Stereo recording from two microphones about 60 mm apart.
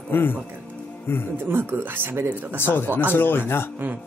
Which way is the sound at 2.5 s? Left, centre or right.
Left.